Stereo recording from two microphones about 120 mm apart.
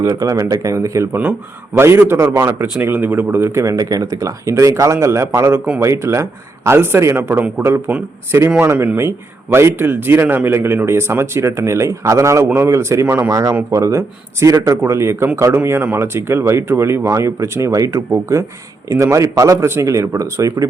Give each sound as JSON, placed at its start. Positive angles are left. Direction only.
{"t": 0.0, "sound": "a man's voice", "side_deg": -25}